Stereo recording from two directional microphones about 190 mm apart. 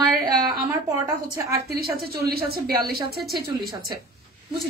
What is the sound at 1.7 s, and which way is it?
A woman's voice, 55° right (ahead or behind).